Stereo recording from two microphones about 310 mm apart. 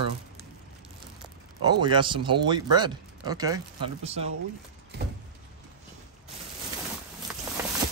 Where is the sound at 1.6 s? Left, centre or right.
Centre.